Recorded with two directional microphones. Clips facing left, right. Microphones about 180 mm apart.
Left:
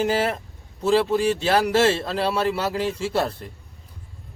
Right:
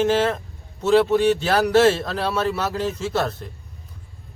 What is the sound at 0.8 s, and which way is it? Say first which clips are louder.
A man's voice: right 3 dB; 30° left (ahead or behind).